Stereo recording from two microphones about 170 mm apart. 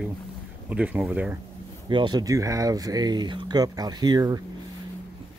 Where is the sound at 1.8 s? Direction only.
25° right (ahead or behind).